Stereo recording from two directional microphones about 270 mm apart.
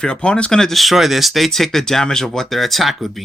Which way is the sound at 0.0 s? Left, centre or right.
Centre.